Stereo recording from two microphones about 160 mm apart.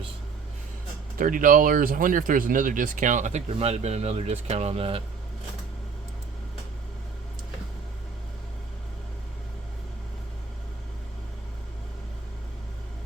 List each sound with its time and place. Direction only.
1.2 s speech: 60° right (ahead or behind); by 5.0 s 35° right (ahead or behind)